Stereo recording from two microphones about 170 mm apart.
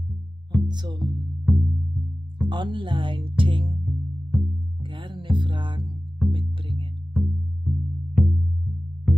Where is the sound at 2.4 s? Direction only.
30° right (ahead or behind).